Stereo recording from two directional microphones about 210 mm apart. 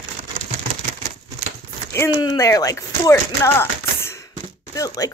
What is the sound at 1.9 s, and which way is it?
Speech, 10° left (ahead or behind).